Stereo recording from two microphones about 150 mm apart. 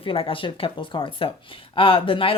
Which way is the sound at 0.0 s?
35° left (ahead or behind).